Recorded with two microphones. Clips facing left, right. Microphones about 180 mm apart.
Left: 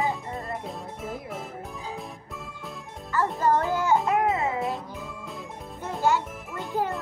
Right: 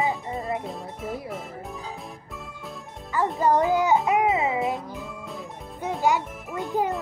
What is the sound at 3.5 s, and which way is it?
Speech, 15° right (ahead or behind).